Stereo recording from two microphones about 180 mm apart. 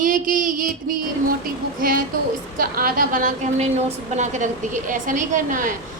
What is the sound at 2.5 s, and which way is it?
A woman's voice, 50° right (ahead or behind).